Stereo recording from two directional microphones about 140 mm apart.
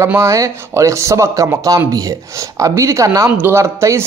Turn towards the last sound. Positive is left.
turn(degrees=-20)  # may be behind; listen again after turning